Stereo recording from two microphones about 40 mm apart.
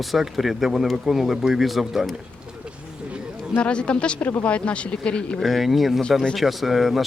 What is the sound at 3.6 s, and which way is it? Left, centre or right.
Speech, left.